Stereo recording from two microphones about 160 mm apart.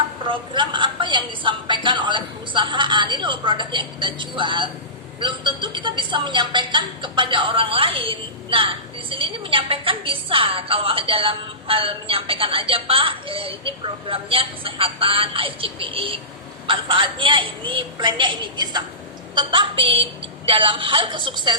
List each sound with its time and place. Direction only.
0.3 s speech: 30° right (ahead or behind)